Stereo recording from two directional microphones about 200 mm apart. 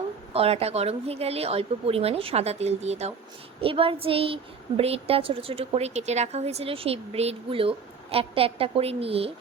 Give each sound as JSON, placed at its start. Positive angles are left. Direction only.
{"t": 0.3, "sound": "a woman's voice", "side_deg": -30}